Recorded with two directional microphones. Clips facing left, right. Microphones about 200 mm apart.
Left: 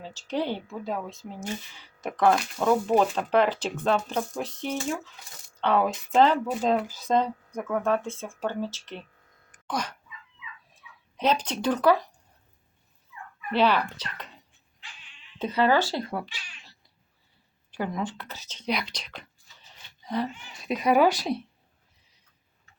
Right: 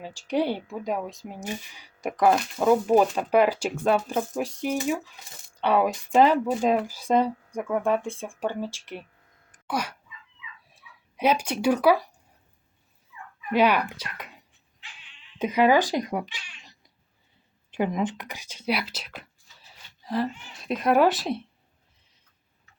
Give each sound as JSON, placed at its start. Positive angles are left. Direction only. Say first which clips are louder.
{"t": 0.0, "sound": "speech", "louder": "right 4 dB", "side_deg": -15}
{"t": 9.6, "sound": "dog", "louder": "right 2 dB", "side_deg": -10}
{"t": 11.2, "sound": "speech", "louder": "right 2 dB", "side_deg": -10}
{"t": 13.5, "sound": "speech", "louder": "right 2 dB", "side_deg": -10}
{"t": 15.4, "sound": "speech", "louder": "right 3 dB", "side_deg": -10}